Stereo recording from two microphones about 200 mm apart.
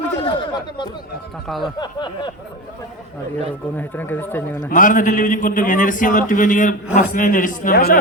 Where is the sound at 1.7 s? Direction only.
20° left (ahead or behind).